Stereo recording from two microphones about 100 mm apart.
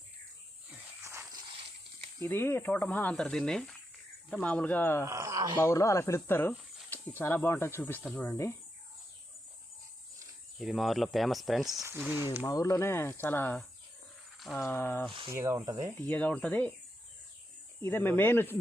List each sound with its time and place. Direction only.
2.2 s speech: 20° left (ahead or behind)
5.0 s speech: 30° right (ahead or behind)
5.5 s speech: 25° left (ahead or behind)
10.6 s speech: centre (ahead or behind)
11.9 s speech: 15° right (ahead or behind)
12.5 s speech: 35° left (ahead or behind)
14.3 s a sound: centre (ahead or behind)
14.6 s speech: 20° left (ahead or behind)
15.1 s speech: 55° right (ahead or behind)
15.4 s speech: 30° right (ahead or behind)
15.6 s speech: 40° right (ahead or behind)
16.0 s speech: 15° left (ahead or behind)
17.8 s speech: 20° left (ahead or behind)